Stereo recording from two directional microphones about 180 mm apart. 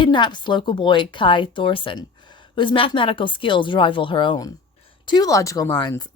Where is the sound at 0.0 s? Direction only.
25° left (ahead or behind).